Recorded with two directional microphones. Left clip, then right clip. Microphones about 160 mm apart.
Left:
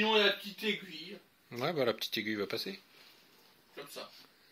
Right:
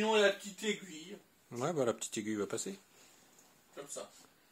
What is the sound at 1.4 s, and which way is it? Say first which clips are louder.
Speech: left 2 dB; 15° right (ahead or behind).